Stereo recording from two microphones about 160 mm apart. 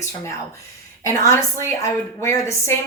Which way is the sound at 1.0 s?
20° left (ahead or behind).